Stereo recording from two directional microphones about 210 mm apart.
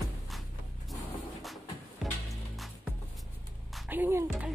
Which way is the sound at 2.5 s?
Centre (ahead or behind).